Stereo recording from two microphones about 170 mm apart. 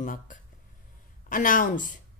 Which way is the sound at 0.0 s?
50° left (ahead or behind).